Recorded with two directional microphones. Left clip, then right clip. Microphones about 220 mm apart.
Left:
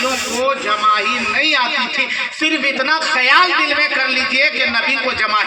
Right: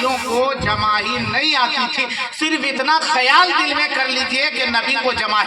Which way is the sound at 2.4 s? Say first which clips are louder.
Left 2 dB; 45° right (ahead or behind).